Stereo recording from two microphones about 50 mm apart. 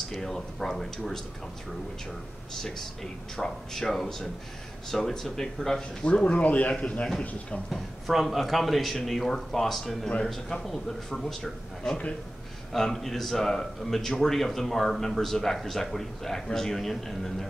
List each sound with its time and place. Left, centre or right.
0.1 s speech: centre
2.5 s speech: centre
6.4 s speech: left
7.7 s speech: centre
10.0 s speech: centre